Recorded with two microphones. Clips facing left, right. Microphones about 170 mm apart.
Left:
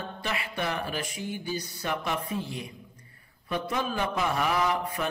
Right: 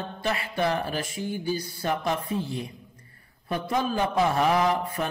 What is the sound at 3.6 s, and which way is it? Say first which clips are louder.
Mantra: right 5 dB; 35° right (ahead or behind).